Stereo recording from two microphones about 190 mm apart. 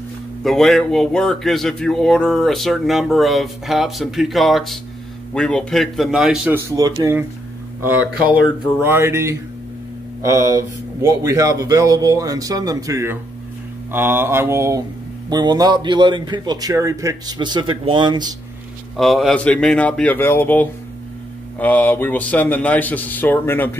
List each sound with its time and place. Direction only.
0.4 s speech: centre (ahead or behind)
6.7 s a man's voice: 15° right (ahead or behind)
18.9 s speech: centre (ahead or behind)